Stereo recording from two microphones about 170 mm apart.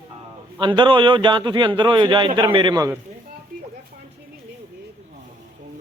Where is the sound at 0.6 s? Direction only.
30° right (ahead or behind).